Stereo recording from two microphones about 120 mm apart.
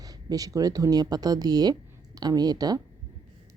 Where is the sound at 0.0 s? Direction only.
30° right (ahead or behind).